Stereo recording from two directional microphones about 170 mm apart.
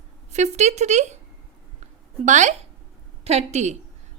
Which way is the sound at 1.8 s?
45° right (ahead or behind).